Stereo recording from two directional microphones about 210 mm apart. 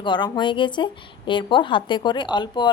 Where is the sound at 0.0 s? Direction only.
20° left (ahead or behind).